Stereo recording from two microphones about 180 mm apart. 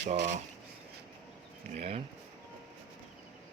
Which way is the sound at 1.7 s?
35° right (ahead or behind).